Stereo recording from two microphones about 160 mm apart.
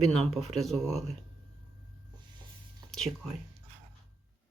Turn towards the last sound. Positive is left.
turn(degrees=0)  # may be behind; listen again after turning